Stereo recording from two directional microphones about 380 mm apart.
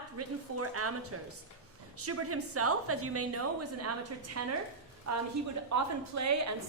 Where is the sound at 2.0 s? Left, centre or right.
Right.